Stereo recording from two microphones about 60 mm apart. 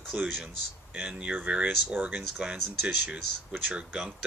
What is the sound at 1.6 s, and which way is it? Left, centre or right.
Speech, right.